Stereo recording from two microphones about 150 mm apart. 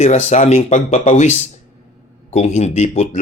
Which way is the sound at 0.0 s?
50° left (ahead or behind).